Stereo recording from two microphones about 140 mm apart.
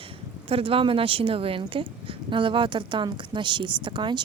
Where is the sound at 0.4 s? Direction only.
40° right (ahead or behind).